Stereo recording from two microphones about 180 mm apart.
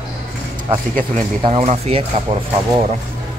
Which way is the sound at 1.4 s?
35° right (ahead or behind).